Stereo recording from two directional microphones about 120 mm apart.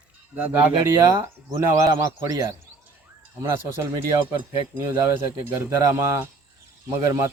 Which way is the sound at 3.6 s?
25° right (ahead or behind).